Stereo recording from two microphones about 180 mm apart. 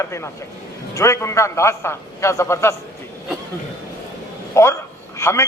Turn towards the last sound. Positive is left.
turn(degrees=15)  # may be behind; listen again after turning